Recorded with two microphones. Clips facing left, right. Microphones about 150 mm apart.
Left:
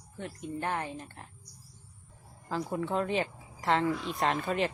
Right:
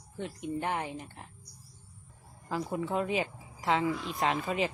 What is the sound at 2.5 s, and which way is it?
A woman's voice, 5° right (ahead or behind).